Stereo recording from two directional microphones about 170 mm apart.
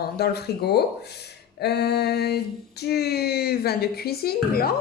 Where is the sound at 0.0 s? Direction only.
70° left (ahead or behind).